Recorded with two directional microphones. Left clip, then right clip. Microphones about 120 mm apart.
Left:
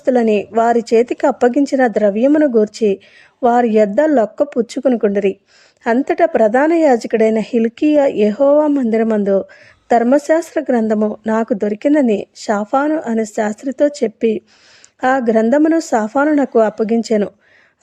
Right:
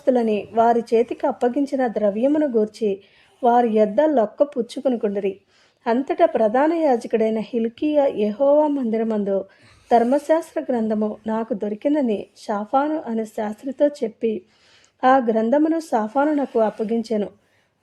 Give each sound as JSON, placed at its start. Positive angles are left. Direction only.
{"t": 0.0, "sound": "speech", "side_deg": 40}